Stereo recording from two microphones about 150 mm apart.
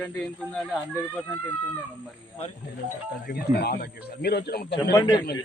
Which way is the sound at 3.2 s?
90° left.